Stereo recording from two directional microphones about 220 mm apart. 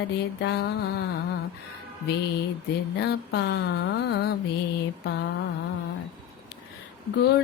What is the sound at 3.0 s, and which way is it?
Mantra, 50° left (ahead or behind).